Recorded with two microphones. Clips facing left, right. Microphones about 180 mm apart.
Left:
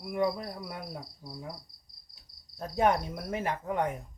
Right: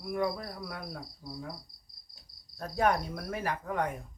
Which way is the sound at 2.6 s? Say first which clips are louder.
Left 2 dB; 20° left (ahead or behind).